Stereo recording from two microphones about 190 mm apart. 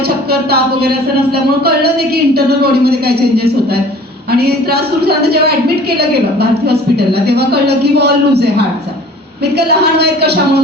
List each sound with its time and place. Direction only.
0.3 s a woman's voice: 55° right (ahead or behind)